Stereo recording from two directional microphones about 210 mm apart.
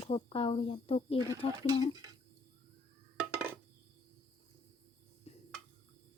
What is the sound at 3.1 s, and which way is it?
Dishes, 5° right (ahead or behind).